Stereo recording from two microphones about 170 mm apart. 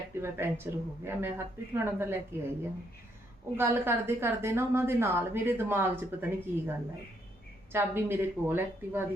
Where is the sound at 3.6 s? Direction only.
15° right (ahead or behind).